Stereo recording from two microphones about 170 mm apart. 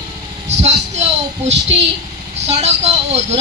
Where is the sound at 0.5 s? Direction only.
40° right (ahead or behind).